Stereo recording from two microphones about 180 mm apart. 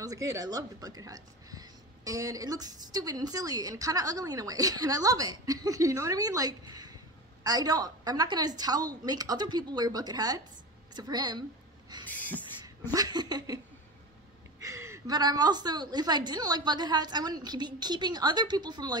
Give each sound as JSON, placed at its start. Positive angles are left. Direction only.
{"t": 0.0, "sound": "a woman's voice", "side_deg": -20}
{"t": 12.1, "sound": "a sound", "side_deg": 10}
{"t": 12.6, "sound": "speech", "side_deg": -20}
{"t": 14.6, "sound": "a woman's voice", "side_deg": -15}